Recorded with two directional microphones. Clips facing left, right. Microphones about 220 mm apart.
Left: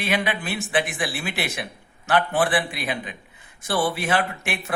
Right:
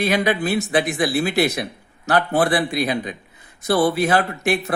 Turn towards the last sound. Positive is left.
turn(degrees=-35)  # may be behind; listen again after turning